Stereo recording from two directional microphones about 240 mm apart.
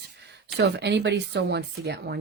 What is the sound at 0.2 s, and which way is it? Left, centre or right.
Speech, right.